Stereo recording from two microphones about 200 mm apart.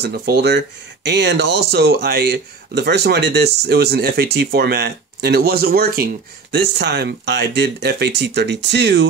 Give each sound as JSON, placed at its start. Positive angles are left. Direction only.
{"t": 0.0, "sound": "speech", "side_deg": -50}